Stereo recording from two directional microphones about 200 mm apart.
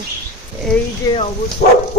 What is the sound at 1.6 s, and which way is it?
Speech, 50° left (ahead or behind).